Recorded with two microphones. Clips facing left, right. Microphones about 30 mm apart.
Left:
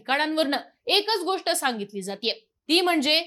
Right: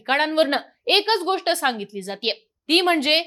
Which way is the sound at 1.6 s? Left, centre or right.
Centre.